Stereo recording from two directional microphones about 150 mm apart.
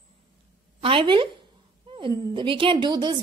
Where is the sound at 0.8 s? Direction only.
35° right (ahead or behind).